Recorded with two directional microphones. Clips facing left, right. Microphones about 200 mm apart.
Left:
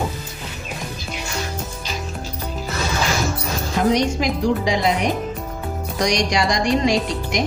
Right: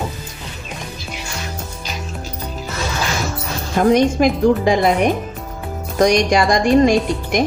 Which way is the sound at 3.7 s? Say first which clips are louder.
Right 5 dB; 50° right (ahead or behind).